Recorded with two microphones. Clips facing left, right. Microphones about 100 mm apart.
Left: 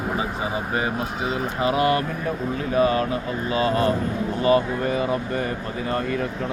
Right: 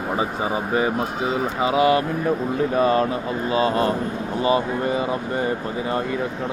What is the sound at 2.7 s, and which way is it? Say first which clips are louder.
Speech: even; 35° right (ahead or behind).